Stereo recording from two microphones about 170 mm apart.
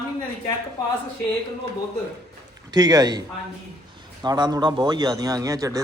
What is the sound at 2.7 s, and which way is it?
Speech, 25° right (ahead or behind).